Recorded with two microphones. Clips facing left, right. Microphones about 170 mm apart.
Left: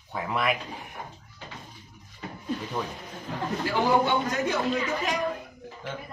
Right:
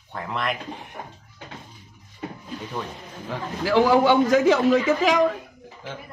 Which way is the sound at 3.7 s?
90° right.